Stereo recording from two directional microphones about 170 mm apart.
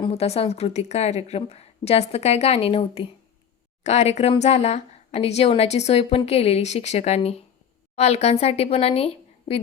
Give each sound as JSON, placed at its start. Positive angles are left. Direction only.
{"t": 0.0, "sound": "speech", "side_deg": 35}